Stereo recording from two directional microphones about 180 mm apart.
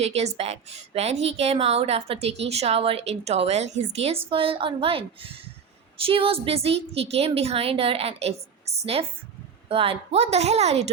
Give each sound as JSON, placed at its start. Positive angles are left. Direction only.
{"t": 0.0, "sound": "a woman's voice", "side_deg": -35}